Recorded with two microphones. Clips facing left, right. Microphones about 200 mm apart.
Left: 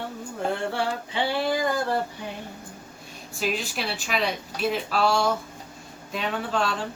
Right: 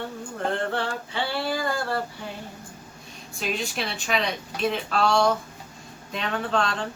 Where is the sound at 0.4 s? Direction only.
10° left (ahead or behind).